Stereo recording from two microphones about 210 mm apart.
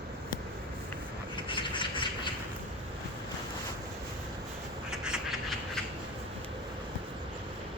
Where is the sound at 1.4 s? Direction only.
25° left (ahead or behind).